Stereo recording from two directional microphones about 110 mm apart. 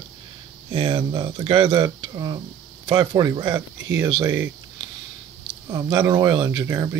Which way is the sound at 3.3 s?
50° right (ahead or behind).